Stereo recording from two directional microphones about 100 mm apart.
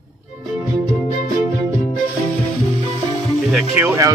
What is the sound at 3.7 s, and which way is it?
Speech, 20° right (ahead or behind).